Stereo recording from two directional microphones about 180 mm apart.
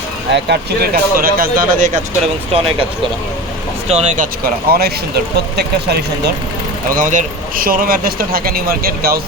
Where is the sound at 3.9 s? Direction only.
40° right (ahead or behind); by 6.3 s 65° right (ahead or behind).